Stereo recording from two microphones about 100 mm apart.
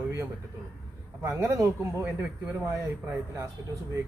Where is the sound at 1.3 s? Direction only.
25° right (ahead or behind).